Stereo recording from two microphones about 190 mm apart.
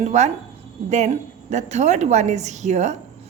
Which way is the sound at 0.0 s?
35° right (ahead or behind).